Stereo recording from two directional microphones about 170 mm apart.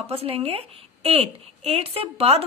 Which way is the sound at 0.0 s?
35° right (ahead or behind).